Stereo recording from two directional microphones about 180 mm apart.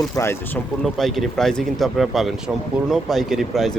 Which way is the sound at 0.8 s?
Centre (ahead or behind).